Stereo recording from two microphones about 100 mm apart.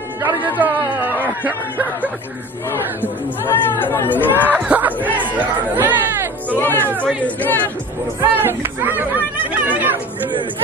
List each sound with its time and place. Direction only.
0.2 s speech: 15° right (ahead or behind)
3.4 s speech: 25° left (ahead or behind)
4.6 s speech: 15° right (ahead or behind)
6.6 s speech: 20° left (ahead or behind)
8.2 s speech: 20° right (ahead or behind)